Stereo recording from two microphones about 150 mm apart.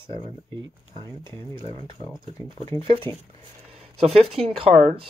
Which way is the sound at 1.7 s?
35° left (ahead or behind).